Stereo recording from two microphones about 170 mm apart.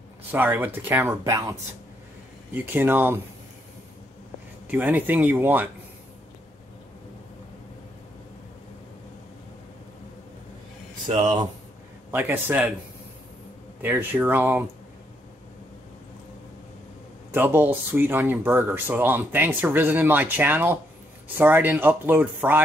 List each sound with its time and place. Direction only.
0.3 s speech: 10° right (ahead or behind)
4.6 s speech: 10° right (ahead or behind)
11.1 s speech: 25° right (ahead or behind)
12.1 s speech: 10° right (ahead or behind)
13.8 s speech: 10° right (ahead or behind)
17.3 s speech: 10° right (ahead or behind)